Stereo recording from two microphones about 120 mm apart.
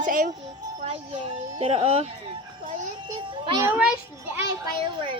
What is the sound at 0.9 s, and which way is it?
Speech, 50° right (ahead or behind).